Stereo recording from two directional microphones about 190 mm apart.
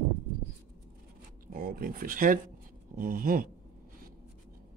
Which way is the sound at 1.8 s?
50° right (ahead or behind).